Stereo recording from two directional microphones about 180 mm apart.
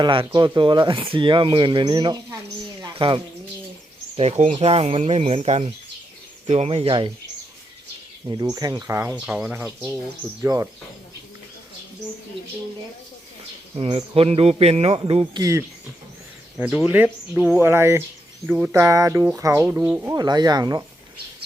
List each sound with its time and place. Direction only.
0.0 s speech: 30° right (ahead or behind)
2.8 s bird: 25° right (ahead or behind)
4.2 s speech: 40° right (ahead or behind)
8.3 s speech: 20° right (ahead or behind)
9.1 s speech: 5° right (ahead or behind)
13.7 s speech: 30° right (ahead or behind)
16.6 s speech: 10° right (ahead or behind)